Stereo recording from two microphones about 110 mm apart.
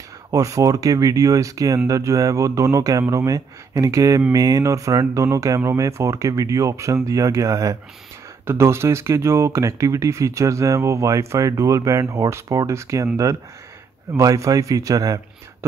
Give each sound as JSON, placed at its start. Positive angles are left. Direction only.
{"t": 0.3, "sound": "speech", "side_deg": -30}